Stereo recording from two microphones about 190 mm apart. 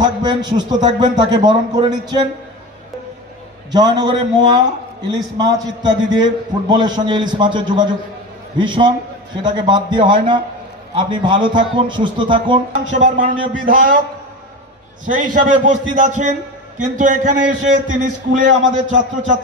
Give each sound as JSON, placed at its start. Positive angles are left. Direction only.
{"t": 0.0, "sound": "a man's voice", "side_deg": -20}
{"t": 3.7, "sound": "a man's voice", "side_deg": -20}
{"t": 12.7, "sound": "a man's voice", "side_deg": -40}
{"t": 15.0, "sound": "a man's voice", "side_deg": -40}